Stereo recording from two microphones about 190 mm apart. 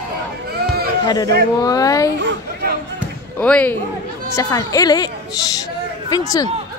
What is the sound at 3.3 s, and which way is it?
Speech, 5° left (ahead or behind).